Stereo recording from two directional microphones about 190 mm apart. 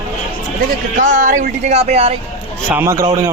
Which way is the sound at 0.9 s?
40° right (ahead or behind).